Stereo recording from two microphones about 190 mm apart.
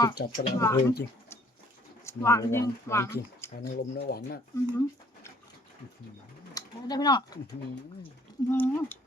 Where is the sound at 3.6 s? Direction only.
55° left (ahead or behind).